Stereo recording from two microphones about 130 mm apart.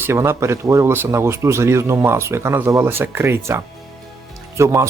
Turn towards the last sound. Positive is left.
turn(degrees=-20)  # may be behind; listen again after turning